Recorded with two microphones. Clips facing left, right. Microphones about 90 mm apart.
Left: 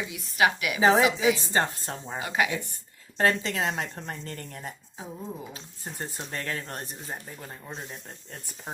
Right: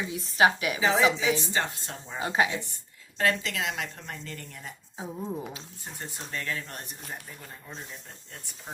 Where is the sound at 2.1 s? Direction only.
30° right (ahead or behind).